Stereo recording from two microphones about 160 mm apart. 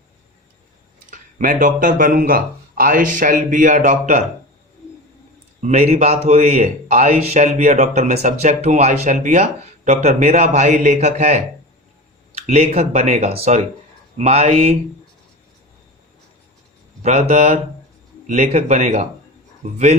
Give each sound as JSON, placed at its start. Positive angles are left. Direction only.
{"t": 1.1, "sound": "speech", "side_deg": -55}
{"t": 5.6, "sound": "a man's voice", "side_deg": -45}
{"t": 17.0, "sound": "a man's voice", "side_deg": -45}